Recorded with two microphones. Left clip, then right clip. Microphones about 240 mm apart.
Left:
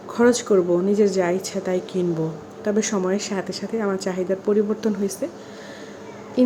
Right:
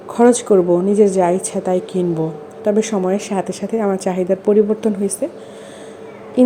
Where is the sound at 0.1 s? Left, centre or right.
Centre.